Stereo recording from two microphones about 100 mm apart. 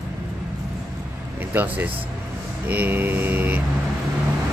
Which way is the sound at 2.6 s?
20° right (ahead or behind).